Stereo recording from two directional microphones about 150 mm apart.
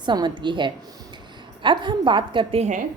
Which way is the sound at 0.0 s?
30° right (ahead or behind).